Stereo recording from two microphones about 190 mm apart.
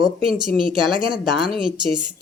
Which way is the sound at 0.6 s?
25° right (ahead or behind).